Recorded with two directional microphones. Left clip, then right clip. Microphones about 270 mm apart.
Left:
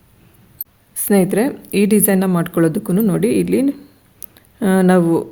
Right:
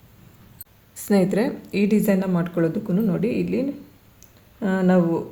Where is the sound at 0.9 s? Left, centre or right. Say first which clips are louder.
Left 5 dB; left.